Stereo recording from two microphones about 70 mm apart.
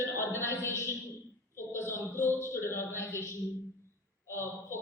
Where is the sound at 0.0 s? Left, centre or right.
Left.